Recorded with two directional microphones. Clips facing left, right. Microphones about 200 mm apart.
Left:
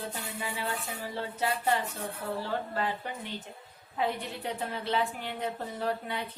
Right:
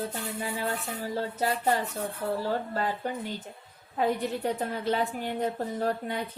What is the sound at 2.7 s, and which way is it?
A woman's voice, 40° right (ahead or behind).